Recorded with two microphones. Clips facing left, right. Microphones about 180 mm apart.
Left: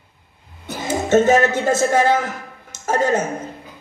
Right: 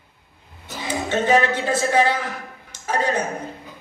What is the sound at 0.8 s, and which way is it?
A man's voice, 45° left (ahead or behind).